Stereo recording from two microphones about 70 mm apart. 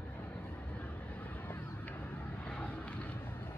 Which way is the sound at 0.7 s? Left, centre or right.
Left.